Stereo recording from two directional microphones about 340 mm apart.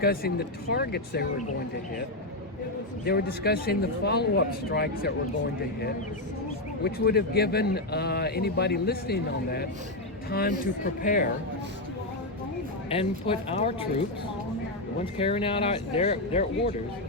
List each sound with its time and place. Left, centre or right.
0.0 s a man's voice: left
3.1 s a man's voice: left
6.8 s a man's voice: left
12.9 s speech: centre
15.2 s speech: centre